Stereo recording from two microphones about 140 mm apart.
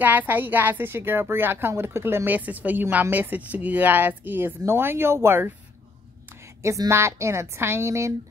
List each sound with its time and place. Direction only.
0.0 s a woman's voice: 15° right (ahead or behind)
6.6 s a woman's voice: 20° right (ahead or behind)